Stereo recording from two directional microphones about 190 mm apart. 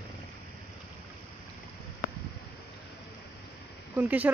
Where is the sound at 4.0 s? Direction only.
10° right (ahead or behind).